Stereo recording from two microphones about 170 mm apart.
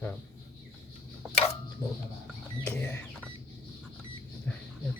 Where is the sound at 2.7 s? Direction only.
10° left (ahead or behind).